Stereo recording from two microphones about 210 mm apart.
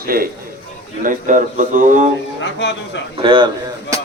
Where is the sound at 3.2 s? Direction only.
25° right (ahead or behind).